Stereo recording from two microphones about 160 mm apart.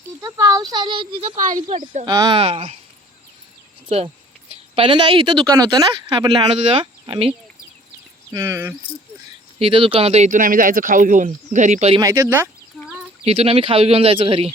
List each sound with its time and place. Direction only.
0.2 s speech: 20° right (ahead or behind)
1.4 s speech: 55° right (ahead or behind)
2.0 s speech: 25° right (ahead or behind)
3.8 s speech: 35° right (ahead or behind)
8.3 s speech: 15° right (ahead or behind)
9.6 s speech: 35° right (ahead or behind)
11.9 s speech: 15° right (ahead or behind)
13.2 s speech: 40° right (ahead or behind)